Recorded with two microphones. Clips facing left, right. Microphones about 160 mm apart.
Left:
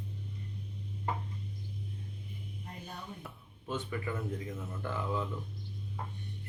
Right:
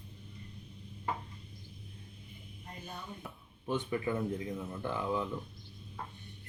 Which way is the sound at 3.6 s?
15° right (ahead or behind).